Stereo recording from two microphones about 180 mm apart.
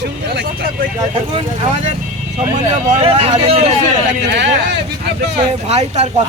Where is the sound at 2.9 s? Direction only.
35° right (ahead or behind).